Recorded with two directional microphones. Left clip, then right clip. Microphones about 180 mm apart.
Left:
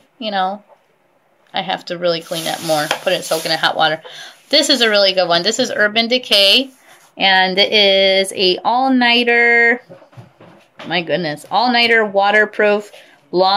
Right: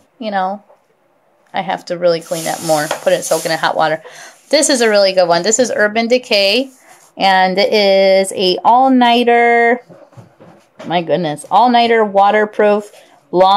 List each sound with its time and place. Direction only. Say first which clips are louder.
0.2 s speech: right 1 dB; 10° right (ahead or behind)
10.9 s speech: right 3 dB; 15° right (ahead or behind)